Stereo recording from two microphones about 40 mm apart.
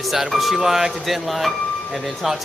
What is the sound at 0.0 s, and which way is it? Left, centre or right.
Speech, centre.